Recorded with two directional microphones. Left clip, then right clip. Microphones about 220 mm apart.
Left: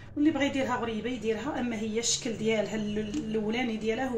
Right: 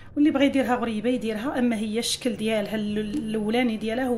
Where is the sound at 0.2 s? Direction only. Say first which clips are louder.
Right 6 dB; 55° right (ahead or behind).